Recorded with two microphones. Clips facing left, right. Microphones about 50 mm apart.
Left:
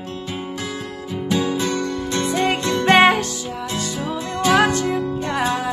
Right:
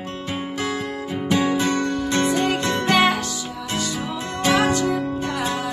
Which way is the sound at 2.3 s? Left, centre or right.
Left.